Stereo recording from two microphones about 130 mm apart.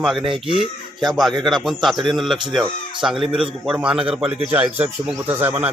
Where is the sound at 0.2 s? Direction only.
40° right (ahead or behind).